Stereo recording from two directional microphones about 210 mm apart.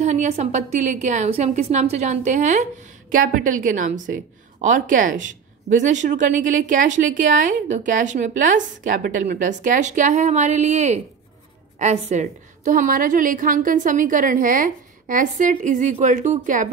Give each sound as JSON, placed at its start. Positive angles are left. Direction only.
{"t": 0.0, "sound": "speech", "side_deg": -35}